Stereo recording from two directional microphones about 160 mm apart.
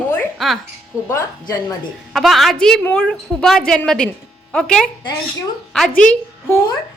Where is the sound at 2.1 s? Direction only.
Centre (ahead or behind).